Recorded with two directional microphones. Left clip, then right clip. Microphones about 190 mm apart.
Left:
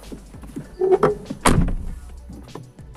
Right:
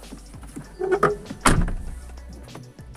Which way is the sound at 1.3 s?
Centre (ahead or behind).